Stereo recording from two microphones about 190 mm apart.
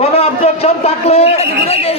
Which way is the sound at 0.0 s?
30° left (ahead or behind).